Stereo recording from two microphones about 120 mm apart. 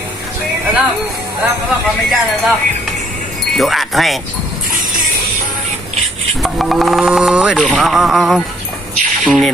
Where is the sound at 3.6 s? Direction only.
Centre (ahead or behind).